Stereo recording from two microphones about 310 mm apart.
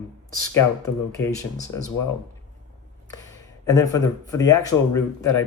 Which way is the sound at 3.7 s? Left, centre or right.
Centre.